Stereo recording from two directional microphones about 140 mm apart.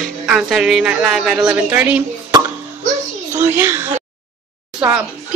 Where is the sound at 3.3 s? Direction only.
15° right (ahead or behind).